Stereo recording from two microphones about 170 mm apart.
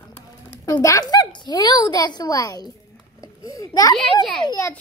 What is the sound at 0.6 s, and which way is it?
A woman's voice, 20° left (ahead or behind).